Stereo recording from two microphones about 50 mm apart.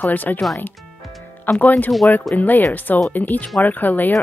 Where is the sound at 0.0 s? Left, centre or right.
Left.